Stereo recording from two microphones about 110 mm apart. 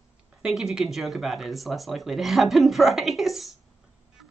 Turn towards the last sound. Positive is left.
turn(degrees=0)  # may be behind; listen again after turning